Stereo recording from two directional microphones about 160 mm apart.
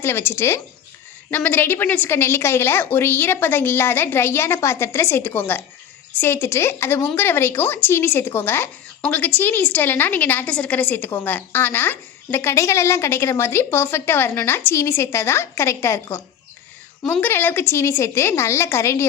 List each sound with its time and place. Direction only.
0.0 s a woman's voice: 15° left (ahead or behind)